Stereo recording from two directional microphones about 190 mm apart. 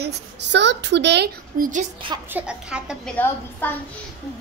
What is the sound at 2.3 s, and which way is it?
Speech, 5° right (ahead or behind).